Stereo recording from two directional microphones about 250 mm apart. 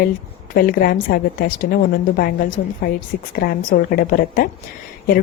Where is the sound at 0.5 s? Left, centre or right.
Left.